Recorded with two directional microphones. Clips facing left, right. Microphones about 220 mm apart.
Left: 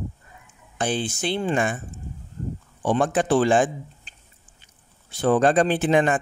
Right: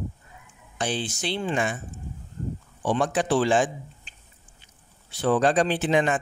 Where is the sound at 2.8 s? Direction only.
50° left (ahead or behind).